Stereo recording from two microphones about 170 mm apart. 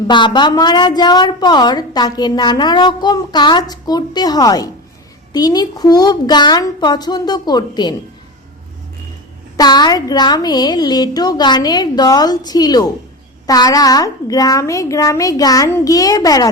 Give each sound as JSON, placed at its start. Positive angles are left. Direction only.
{"t": 0.1, "sound": "a woman's voice", "side_deg": 25}
{"t": 9.6, "sound": "a woman's voice", "side_deg": 25}